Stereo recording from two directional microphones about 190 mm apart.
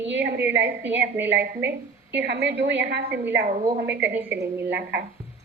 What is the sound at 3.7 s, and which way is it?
Speech, 60° right (ahead or behind).